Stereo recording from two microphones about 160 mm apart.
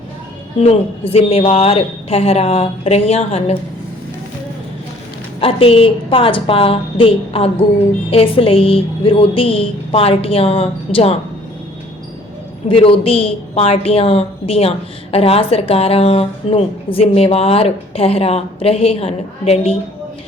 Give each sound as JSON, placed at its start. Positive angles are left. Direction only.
{"t": 0.6, "sound": "a woman's voice", "side_deg": 40}
{"t": 5.4, "sound": "a woman's voice", "side_deg": 35}
{"t": 12.6, "sound": "a woman's voice", "side_deg": 35}